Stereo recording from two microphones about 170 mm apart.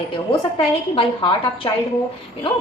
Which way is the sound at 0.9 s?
30° left (ahead or behind).